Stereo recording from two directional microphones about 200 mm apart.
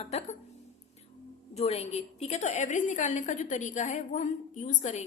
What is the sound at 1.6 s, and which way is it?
A woman's voice, 30° left (ahead or behind).